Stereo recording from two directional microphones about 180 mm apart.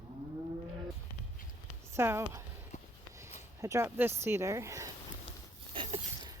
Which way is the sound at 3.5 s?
15° right (ahead or behind).